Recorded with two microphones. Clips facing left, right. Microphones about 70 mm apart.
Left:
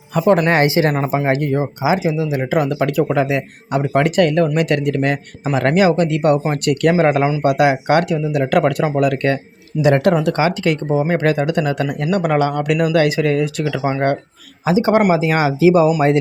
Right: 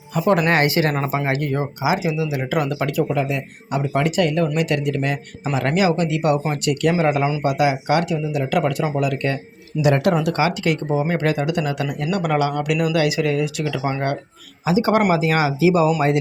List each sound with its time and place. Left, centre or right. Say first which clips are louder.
0.4 s speech: left 3 dB; left
3.1 s speech: left 5 dB; left
3.7 s speech: left 4 dB; left
7.4 s speech: left 5 dB; left
9.8 s speech: left 4 dB; left
14.8 s speech: left 3 dB; left